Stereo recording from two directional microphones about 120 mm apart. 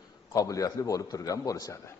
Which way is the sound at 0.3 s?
30° left (ahead or behind).